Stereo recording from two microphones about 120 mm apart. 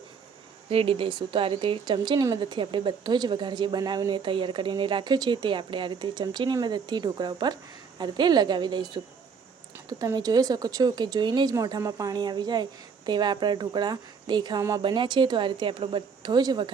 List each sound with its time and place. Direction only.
0.7 s a woman's voice: 50° right (ahead or behind)
10.2 s a woman's voice: 35° right (ahead or behind)